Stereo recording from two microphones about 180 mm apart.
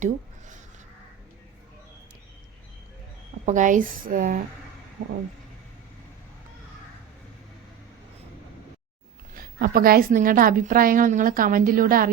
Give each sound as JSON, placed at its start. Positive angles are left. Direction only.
{"t": 3.4, "sound": "a woman's voice", "side_deg": -45}
{"t": 9.3, "sound": "a woman's voice", "side_deg": -55}